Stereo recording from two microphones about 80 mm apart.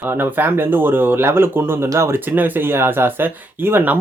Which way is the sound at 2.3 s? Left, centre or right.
Right.